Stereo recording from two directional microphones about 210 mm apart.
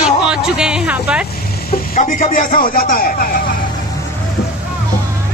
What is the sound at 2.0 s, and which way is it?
A man's voice, 35° left (ahead or behind).